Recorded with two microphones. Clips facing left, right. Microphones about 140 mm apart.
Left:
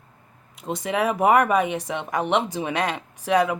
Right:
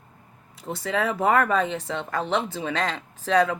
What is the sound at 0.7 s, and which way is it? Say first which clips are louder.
Speech: left 2 dB; 20° left (ahead or behind).